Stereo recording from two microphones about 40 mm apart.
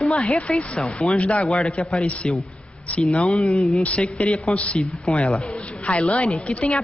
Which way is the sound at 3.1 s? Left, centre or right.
Left.